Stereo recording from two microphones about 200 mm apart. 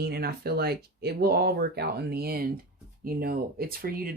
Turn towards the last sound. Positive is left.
turn(degrees=-50)  # may be behind; listen again after turning